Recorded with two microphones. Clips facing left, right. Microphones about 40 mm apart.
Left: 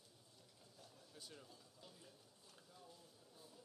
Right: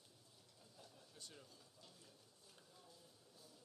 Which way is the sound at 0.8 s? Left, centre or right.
Centre.